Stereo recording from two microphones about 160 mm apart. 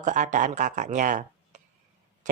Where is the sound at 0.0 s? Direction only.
50° right (ahead or behind).